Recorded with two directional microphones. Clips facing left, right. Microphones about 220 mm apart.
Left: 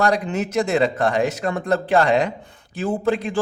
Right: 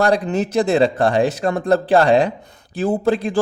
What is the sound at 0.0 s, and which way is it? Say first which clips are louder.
Speech: right 3 dB; 35° right (ahead or behind).